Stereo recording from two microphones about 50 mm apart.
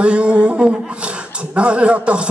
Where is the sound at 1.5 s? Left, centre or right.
Right.